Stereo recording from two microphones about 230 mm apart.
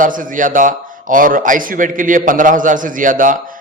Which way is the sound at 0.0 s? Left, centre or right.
Right.